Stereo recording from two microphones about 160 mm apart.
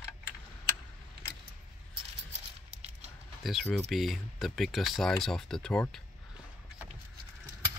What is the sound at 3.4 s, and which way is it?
Speech, centre (ahead or behind).